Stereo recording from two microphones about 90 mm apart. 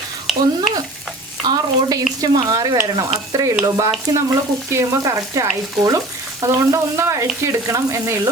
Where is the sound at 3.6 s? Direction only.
35° right (ahead or behind).